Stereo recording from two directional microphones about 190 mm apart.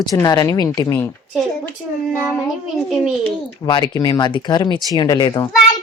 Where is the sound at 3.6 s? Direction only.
20° left (ahead or behind).